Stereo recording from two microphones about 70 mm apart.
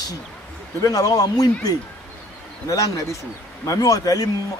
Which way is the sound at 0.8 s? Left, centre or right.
Left.